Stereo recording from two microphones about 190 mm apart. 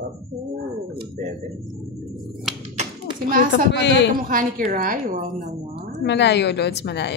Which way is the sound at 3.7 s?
65° left (ahead or behind).